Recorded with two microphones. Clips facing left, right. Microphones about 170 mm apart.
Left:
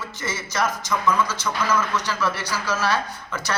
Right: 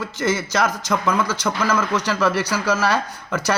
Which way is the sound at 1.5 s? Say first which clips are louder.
Right 4 dB; 60° right (ahead or behind).